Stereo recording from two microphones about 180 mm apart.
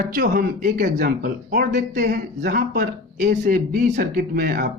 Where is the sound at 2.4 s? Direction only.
65° right (ahead or behind).